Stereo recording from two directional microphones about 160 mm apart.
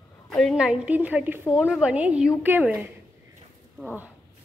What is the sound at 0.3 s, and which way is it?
A woman's voice, centre (ahead or behind).